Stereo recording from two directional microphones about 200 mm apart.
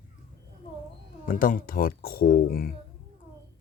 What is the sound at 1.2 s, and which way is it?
Speech, 45° left (ahead or behind).